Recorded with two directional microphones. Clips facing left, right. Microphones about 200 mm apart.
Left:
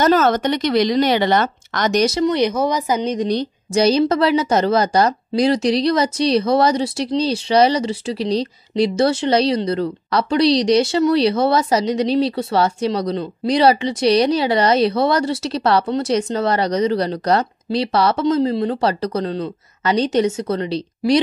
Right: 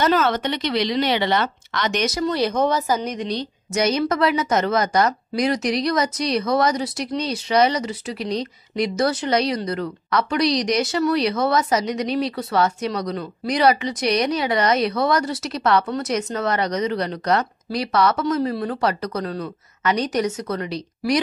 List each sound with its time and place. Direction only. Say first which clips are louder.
0.0 s speech: left 4 dB; 45° left (ahead or behind)
2.0 s a woman's voice: left 5 dB; 20° left (ahead or behind)
3.7 s a woman's voice: left 5 dB; 30° left (ahead or behind)